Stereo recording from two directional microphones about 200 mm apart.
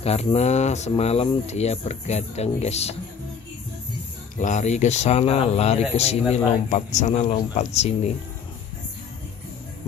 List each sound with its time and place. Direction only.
0.0 s speech: 30° left (ahead or behind)
4.4 s speech: 35° left (ahead or behind)